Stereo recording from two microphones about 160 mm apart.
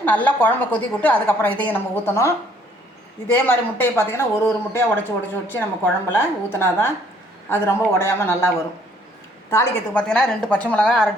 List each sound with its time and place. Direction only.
0.0 s speech: 10° left (ahead or behind)
9.5 s a woman's voice: 15° left (ahead or behind)